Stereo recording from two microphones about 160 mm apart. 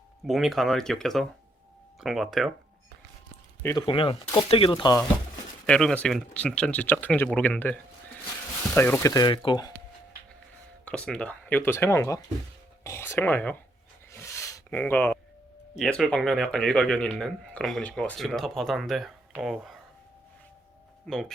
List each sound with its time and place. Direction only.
0.3 s speech: centre (ahead or behind)
3.6 s speech: 15° left (ahead or behind)
3.8 s speech: 35° left (ahead or behind)
5.6 s speech: 5° left (ahead or behind); by 9.7 s 25° left (ahead or behind)
10.8 s speech: 5° left (ahead or behind)
12.8 s a sound: 15° left (ahead or behind)
14.8 s speech: 10° left (ahead or behind)
21.1 s speech: 5° left (ahead or behind)